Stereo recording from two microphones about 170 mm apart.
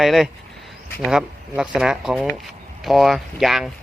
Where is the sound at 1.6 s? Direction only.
5° right (ahead or behind).